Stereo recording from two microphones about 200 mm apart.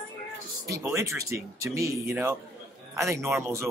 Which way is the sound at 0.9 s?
15° right (ahead or behind).